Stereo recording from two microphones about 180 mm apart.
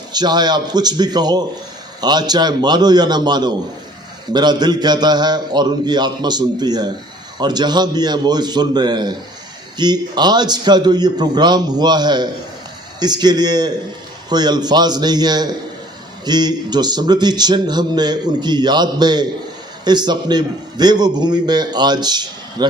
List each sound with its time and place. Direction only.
0.1 s speech: 25° right (ahead or behind)